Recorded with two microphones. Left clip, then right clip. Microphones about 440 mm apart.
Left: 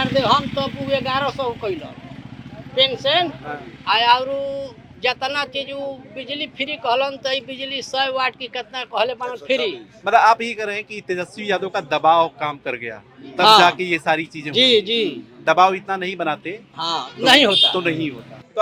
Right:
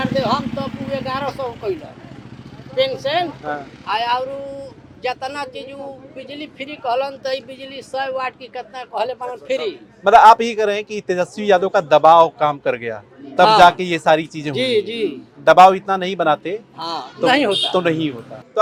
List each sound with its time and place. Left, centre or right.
0.0 s vehicle: left
2.7 s speech: left
10.0 s a man's voice: right
14.5 s speech: left
15.4 s a man's voice: right
16.7 s speech: left
17.7 s a man's voice: right